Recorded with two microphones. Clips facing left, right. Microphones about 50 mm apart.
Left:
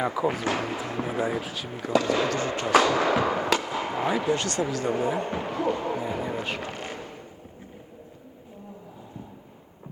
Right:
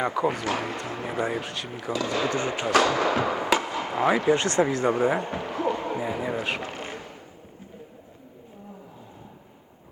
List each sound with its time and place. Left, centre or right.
0.0 s speech: centre
1.8 s speech: left
2.2 s speech: right
2.9 s speech: centre
3.4 s fireworks: centre
3.7 s fireworks: centre
4.3 s speech: right
5.4 s a sound: centre